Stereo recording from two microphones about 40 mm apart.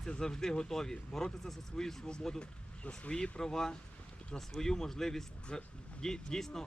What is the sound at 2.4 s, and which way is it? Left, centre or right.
Speech, left.